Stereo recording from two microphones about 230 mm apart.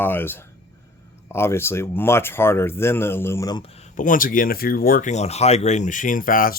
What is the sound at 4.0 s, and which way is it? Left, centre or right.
Speech, left.